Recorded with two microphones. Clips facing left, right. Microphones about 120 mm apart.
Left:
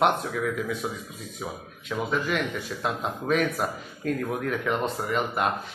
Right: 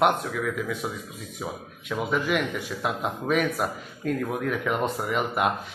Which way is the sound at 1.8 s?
10° right (ahead or behind).